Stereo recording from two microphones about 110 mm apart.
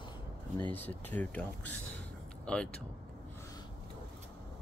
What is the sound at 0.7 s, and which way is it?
Speech, 15° left (ahead or behind).